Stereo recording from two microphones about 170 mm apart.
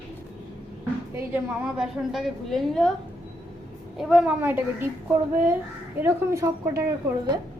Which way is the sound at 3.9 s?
5° right (ahead or behind).